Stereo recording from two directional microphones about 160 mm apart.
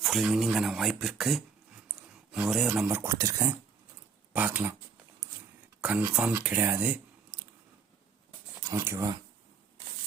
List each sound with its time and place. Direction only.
0.0 s speech: centre (ahead or behind)
5.8 s speech: 10° right (ahead or behind)
8.6 s speech: 20° right (ahead or behind)